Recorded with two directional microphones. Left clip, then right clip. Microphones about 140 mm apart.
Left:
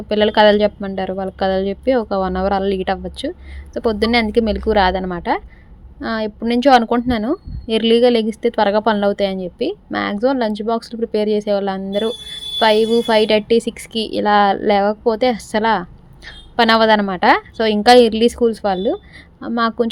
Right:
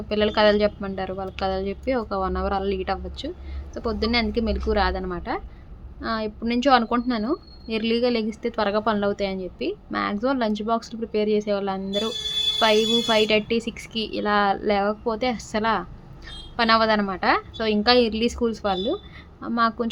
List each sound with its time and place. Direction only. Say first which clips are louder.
0.1 s a woman's voice: left 7 dB; 45° left (ahead or behind)